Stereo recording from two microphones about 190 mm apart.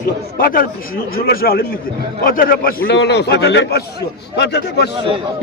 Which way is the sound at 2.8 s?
65° left (ahead or behind).